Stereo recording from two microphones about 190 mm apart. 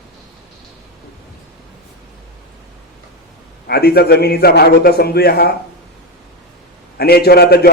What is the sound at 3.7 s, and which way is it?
A man's voice, 55° left (ahead or behind).